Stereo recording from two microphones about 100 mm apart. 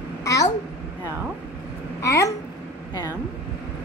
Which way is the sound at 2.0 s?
30° left (ahead or behind).